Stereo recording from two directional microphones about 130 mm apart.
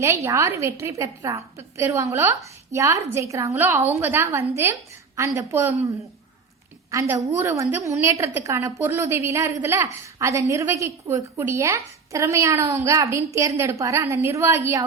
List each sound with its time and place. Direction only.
0.0 s a woman's voice: 25° right (ahead or behind)
7.2 s a woman's voice: 20° right (ahead or behind)